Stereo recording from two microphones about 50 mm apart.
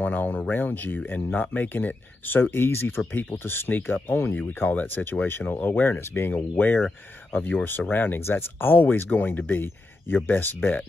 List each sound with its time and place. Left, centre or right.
0.0 s speech: left
6.5 s speech: left